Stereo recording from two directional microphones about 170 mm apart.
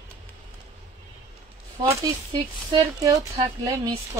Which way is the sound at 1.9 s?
20° right (ahead or behind).